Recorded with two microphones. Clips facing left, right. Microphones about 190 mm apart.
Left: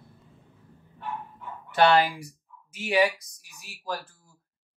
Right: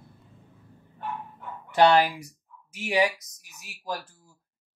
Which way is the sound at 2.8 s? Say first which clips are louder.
Left 1 dB; 15° right (ahead or behind).